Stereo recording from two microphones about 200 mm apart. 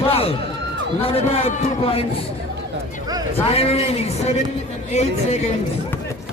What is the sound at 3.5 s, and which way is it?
A man's voice, 30° left (ahead or behind).